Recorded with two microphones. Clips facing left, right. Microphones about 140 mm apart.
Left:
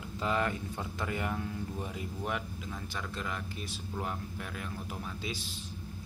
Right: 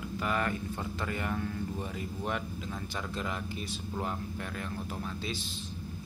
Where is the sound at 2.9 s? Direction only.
10° right (ahead or behind); by 5.4 s 10° left (ahead or behind).